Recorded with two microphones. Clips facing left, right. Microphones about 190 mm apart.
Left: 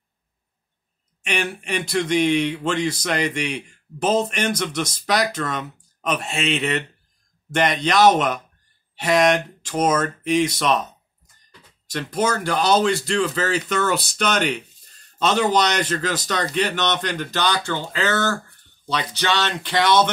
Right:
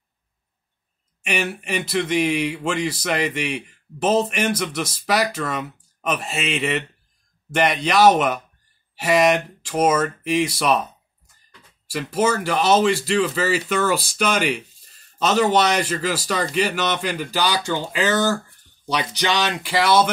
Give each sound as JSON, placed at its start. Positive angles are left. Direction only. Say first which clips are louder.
{"t": 1.2, "sound": "speech", "louder": "right 1 dB", "side_deg": -5}
{"t": 11.9, "sound": "speech", "louder": "right 2 dB", "side_deg": -5}